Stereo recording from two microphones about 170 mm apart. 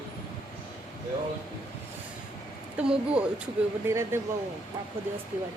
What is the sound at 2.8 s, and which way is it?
Speech, 5° right (ahead or behind).